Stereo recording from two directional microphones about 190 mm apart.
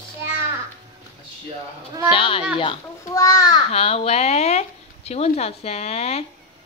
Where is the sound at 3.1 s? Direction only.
15° left (ahead or behind).